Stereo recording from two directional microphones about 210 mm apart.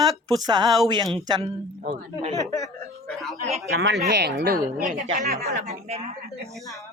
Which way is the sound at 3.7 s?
55° right (ahead or behind).